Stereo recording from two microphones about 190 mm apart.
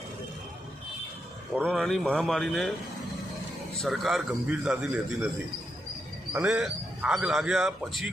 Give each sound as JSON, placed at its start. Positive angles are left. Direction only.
{"t": 1.6, "sound": "speech", "side_deg": 0}
{"t": 3.8, "sound": "speech", "side_deg": 0}
{"t": 6.3, "sound": "speech", "side_deg": -5}